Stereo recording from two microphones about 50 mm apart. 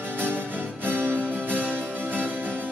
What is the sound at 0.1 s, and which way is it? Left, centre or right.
Music, right.